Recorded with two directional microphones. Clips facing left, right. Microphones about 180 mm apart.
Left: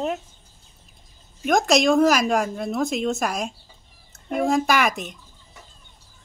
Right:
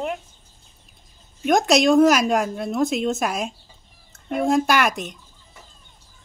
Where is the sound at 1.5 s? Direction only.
Centre (ahead or behind).